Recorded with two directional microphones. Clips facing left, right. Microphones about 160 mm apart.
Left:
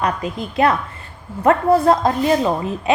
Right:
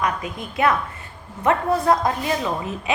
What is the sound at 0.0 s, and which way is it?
Speech, 30° left (ahead or behind).